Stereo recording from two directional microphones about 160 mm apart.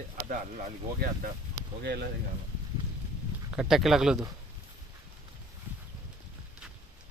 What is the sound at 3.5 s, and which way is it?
Speech, 5° right (ahead or behind).